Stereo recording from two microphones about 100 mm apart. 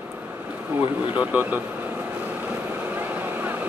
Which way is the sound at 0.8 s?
15° right (ahead or behind).